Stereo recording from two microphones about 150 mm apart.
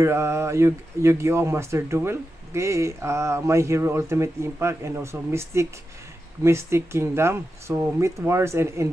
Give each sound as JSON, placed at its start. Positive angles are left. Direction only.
{"t": 0.0, "sound": "speech", "side_deg": -20}